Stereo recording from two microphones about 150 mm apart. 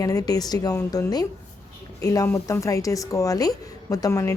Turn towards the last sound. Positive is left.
turn(degrees=20)  # may be behind; listen again after turning